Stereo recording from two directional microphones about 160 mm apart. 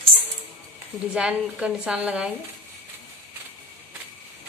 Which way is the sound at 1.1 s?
5° right (ahead or behind).